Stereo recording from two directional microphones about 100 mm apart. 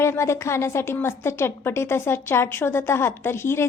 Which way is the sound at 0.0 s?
25° left (ahead or behind).